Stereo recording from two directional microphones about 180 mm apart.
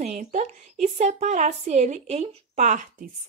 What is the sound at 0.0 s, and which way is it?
A woman's voice, 40° right (ahead or behind).